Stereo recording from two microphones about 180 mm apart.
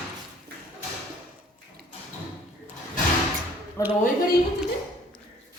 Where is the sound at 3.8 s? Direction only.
15° left (ahead or behind).